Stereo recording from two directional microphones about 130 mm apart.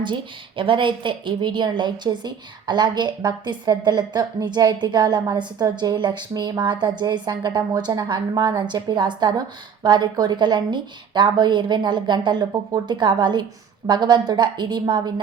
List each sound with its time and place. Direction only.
0.0 s a woman's voice: 40° right (ahead or behind)